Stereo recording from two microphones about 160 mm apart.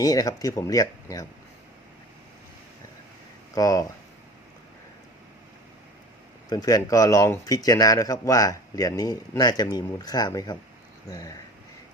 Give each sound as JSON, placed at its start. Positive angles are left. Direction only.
{"t": 0.0, "sound": "speech", "side_deg": 20}
{"t": 3.5, "sound": "speech", "side_deg": 20}
{"t": 6.5, "sound": "speech", "side_deg": 25}